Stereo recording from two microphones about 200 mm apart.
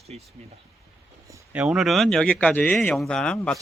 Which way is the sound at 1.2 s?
10° right (ahead or behind).